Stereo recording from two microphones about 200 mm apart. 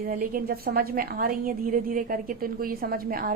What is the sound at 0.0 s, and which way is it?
A woman's voice, 45° right (ahead or behind).